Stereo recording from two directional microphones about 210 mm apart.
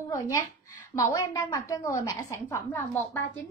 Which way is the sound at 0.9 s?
15° left (ahead or behind).